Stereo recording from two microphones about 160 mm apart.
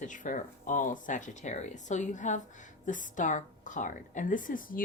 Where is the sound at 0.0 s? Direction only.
55° left (ahead or behind).